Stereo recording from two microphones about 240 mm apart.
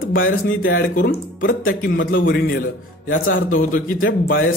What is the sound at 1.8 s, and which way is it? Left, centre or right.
Speech, left.